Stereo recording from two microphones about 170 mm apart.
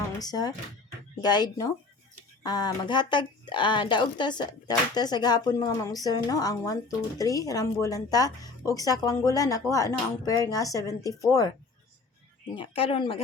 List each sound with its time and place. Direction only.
0.2 s a woman's voice: 25° left (ahead or behind)
12.5 s speech: 35° left (ahead or behind)